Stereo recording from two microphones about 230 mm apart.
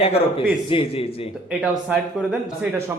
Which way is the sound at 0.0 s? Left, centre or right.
Left.